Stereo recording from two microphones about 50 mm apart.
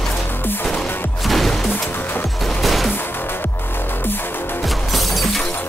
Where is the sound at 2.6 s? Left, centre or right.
Centre.